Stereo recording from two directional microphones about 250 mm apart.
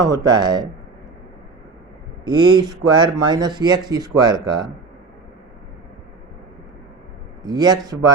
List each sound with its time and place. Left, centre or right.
0.0 s speech: centre
2.2 s speech: centre
7.4 s speech: centre